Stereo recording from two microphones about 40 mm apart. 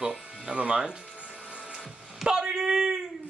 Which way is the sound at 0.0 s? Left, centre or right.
Right.